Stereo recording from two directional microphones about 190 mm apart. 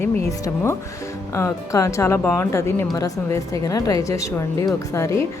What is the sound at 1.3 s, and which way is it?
Speech, 15° left (ahead or behind).